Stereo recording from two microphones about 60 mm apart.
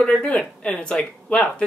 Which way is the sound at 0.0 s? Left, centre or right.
Centre.